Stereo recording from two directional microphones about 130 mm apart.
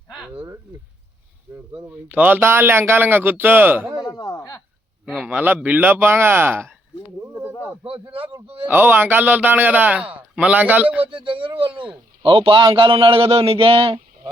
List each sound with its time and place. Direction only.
1.5 s a man's voice: 20° right (ahead or behind)
4.0 s a sound: 30° left (ahead or behind)
5.0 s a man's voice: centre (ahead or behind)
5.4 s a man's voice: 10° right (ahead or behind)
7.9 s a man's voice: 45° right (ahead or behind)
8.6 s a man's voice: 15° right (ahead or behind)
11.0 s a man's voice: 40° right (ahead or behind)